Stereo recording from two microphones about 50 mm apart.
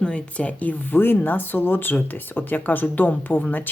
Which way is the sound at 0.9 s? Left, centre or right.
Left.